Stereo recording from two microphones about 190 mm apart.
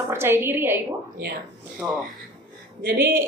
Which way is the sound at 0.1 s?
10° right (ahead or behind).